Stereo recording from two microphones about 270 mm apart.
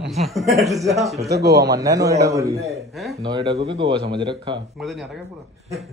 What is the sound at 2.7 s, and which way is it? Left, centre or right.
Speech, centre.